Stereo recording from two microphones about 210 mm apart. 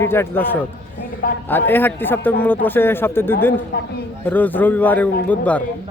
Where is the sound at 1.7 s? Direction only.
10° left (ahead or behind).